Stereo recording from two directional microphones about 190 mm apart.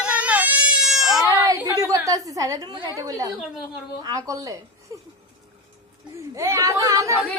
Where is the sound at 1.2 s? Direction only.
20° right (ahead or behind).